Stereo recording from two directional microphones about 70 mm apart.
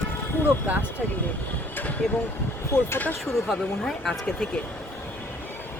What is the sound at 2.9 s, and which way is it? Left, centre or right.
Speech, left.